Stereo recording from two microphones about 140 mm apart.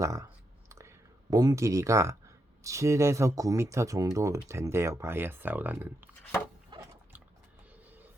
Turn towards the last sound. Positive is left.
turn(degrees=-30)  # may be behind; listen again after turning